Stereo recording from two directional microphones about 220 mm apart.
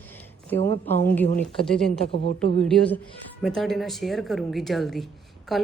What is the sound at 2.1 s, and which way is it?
Speech, 25° left (ahead or behind).